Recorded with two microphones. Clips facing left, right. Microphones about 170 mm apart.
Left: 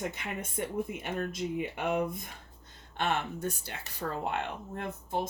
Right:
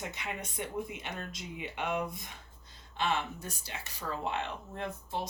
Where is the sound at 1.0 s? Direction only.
50° left (ahead or behind).